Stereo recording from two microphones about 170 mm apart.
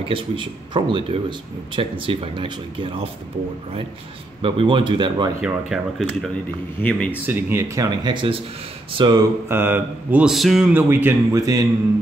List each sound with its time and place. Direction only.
0.1 s speech: 30° right (ahead or behind)
4.4 s speech: 30° right (ahead or behind)
5.4 s speech: centre (ahead or behind)
6.8 s speech: 10° left (ahead or behind)
7.2 s speech: 15° right (ahead or behind)
9.5 s speech: 15° right (ahead or behind)